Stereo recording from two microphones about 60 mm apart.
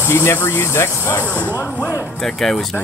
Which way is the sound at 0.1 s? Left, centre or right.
Left.